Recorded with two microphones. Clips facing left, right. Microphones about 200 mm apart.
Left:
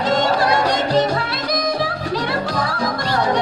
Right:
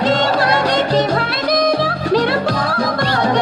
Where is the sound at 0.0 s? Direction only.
65° right (ahead or behind).